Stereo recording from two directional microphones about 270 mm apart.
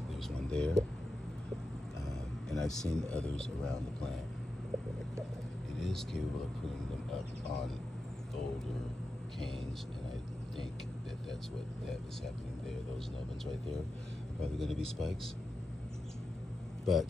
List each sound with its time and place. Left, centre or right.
0.3 s a sound: centre
2.0 s speech: centre
5.8 s speech: centre
14.4 s speech: centre
16.8 s speech: centre